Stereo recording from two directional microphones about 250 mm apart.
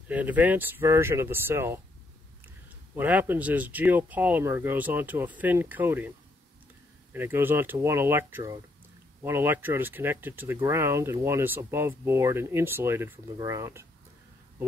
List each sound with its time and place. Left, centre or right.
0.1 s speech: centre
3.0 s speech: centre